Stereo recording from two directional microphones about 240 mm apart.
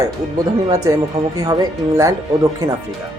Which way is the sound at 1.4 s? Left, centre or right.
Centre.